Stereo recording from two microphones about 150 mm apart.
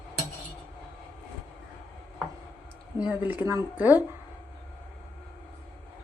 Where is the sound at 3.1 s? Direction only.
10° right (ahead or behind).